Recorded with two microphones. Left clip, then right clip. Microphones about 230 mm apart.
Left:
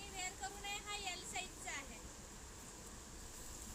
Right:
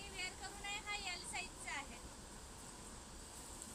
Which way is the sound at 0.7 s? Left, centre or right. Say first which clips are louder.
Right 3 dB; centre.